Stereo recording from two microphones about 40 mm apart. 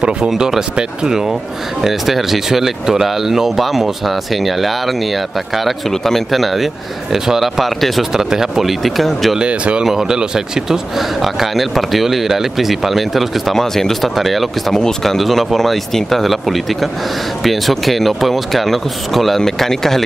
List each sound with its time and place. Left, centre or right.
0.7 s speech: centre
8.1 s speech: centre
9.4 s speech: right
9.8 s speech: centre
11.0 s speech: centre
13.6 s speech: centre